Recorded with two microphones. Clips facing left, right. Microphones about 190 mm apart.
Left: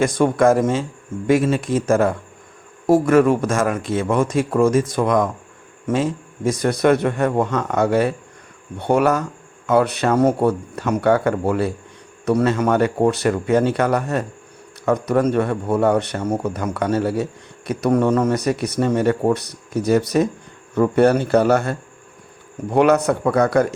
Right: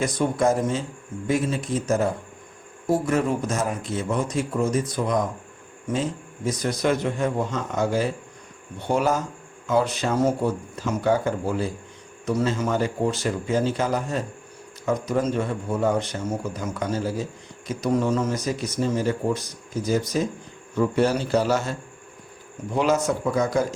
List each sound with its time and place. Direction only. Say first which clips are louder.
0.4 s a man's voice: left 6 dB; 60° left (ahead or behind)
6.5 s speech: left 7 dB; 60° left (ahead or behind)